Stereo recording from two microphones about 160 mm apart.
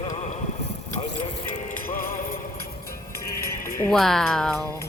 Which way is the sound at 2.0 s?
65° left (ahead or behind).